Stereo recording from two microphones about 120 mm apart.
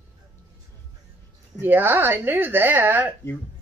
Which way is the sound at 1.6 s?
20° right (ahead or behind).